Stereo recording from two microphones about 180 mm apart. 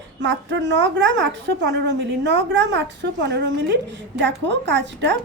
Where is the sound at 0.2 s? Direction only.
90° right.